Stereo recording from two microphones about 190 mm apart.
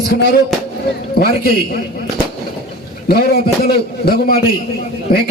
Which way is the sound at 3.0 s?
55° left (ahead or behind).